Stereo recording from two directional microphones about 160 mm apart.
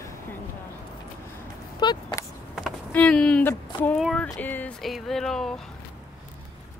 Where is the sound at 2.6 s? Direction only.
5° left (ahead or behind).